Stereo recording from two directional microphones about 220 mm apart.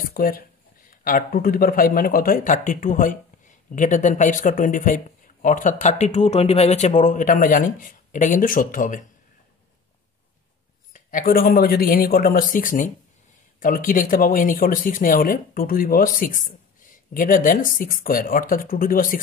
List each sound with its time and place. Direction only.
0.0 s speech: 40° left (ahead or behind)
10.9 s speech: 40° left (ahead or behind)